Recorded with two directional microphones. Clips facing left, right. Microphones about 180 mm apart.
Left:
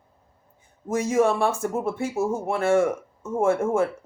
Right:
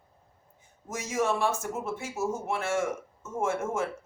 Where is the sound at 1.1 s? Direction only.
55° left (ahead or behind).